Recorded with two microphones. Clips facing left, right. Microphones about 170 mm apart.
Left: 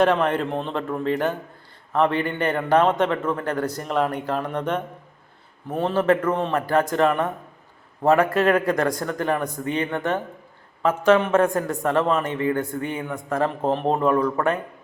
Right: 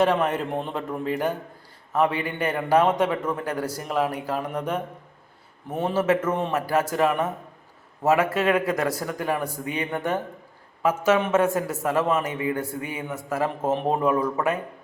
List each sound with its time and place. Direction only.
0.0 s a man's voice: 5° right (ahead or behind)